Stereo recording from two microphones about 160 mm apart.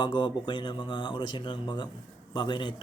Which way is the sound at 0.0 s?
30° left (ahead or behind).